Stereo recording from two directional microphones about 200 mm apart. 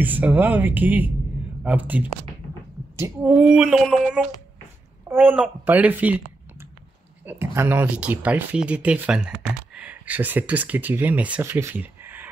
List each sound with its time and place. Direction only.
0.0 s speech: 10° right (ahead or behind)
7.2 s speech: 10° right (ahead or behind)